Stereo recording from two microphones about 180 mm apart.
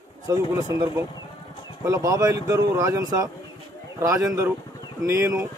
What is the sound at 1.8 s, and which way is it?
Speech, 20° right (ahead or behind).